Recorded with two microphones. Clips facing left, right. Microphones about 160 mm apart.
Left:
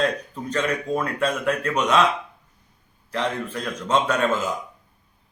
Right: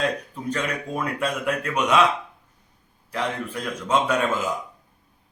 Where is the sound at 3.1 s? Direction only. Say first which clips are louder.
Left 2 dB; 10° right (ahead or behind).